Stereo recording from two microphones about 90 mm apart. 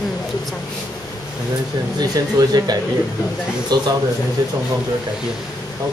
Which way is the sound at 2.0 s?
50° right (ahead or behind).